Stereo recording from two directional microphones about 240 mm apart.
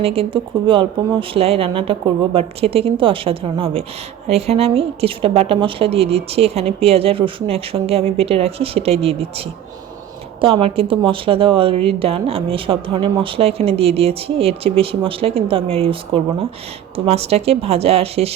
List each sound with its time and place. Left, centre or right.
0.0 s a woman's voice: right
10.4 s a woman's voice: right